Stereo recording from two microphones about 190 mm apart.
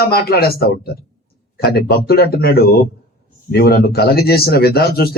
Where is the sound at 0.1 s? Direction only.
55° left (ahead or behind).